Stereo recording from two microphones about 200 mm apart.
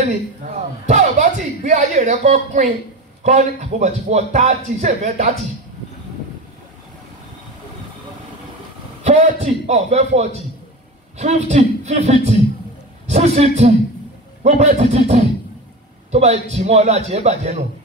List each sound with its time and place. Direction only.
0.8 s a man's voice: 35° right (ahead or behind)
9.0 s a man's voice: 35° right (ahead or behind)